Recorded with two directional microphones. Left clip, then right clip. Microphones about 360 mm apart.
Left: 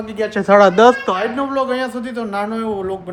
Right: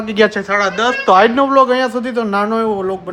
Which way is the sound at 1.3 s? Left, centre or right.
Centre.